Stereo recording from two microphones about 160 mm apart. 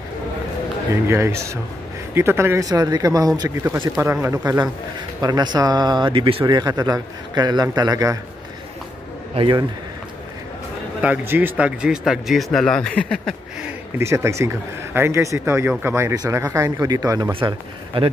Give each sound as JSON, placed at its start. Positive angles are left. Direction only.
{"t": 1.0, "sound": "a man's voice", "side_deg": -15}
{"t": 5.2, "sound": "a man's voice", "side_deg": -25}
{"t": 9.3, "sound": "a man's voice", "side_deg": -35}
{"t": 11.0, "sound": "speech", "side_deg": -10}
{"t": 13.7, "sound": "a man's voice", "side_deg": -15}
{"t": 17.3, "sound": "a man's voice", "side_deg": -35}